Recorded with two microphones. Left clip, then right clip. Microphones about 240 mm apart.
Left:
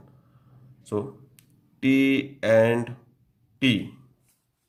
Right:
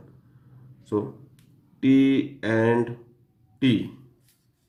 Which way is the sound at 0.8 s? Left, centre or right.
Left.